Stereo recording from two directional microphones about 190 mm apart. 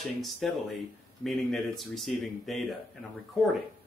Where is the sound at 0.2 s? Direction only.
Centre (ahead or behind).